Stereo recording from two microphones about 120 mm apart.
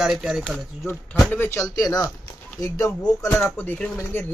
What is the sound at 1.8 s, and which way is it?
Speech, 30° left (ahead or behind).